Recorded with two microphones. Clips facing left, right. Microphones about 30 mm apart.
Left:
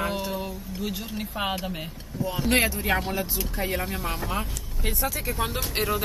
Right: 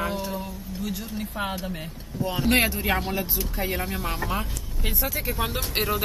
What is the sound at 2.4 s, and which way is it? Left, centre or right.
Speech, centre.